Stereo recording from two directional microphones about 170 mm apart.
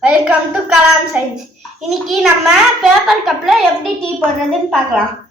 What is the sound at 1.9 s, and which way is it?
A woman's voice, centre (ahead or behind).